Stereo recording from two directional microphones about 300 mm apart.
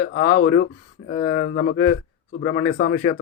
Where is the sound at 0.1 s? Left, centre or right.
Left.